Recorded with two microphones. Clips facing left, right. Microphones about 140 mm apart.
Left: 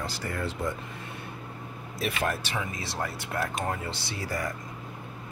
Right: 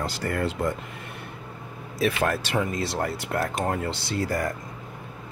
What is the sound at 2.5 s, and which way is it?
Speech, 50° right (ahead or behind).